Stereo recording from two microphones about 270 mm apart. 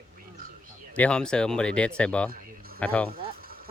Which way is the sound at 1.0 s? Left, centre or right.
Centre.